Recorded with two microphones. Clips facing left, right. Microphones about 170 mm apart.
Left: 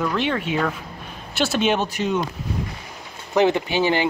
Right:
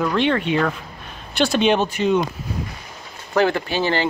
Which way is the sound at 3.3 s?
20° left (ahead or behind).